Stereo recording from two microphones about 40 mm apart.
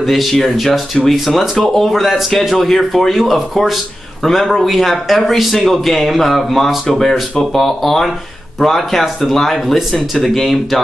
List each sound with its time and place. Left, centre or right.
0.0 s speech: centre